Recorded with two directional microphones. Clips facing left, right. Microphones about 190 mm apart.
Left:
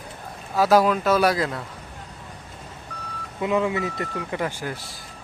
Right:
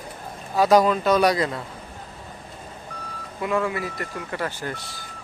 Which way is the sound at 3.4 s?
20° left (ahead or behind).